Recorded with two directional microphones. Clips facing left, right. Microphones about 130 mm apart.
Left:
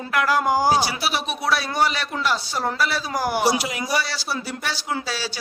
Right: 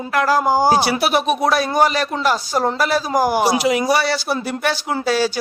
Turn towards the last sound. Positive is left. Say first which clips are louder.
# right 9 dB
turn(degrees=-55)  # may be behind; listen again after turning